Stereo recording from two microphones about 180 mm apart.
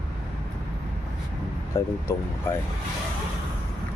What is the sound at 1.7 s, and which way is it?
Speech, 15° left (ahead or behind).